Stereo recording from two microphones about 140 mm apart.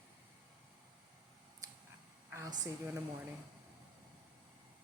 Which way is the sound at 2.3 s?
25° right (ahead or behind).